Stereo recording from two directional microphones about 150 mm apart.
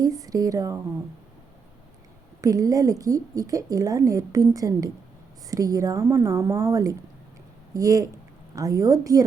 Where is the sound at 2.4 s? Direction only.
25° right (ahead or behind).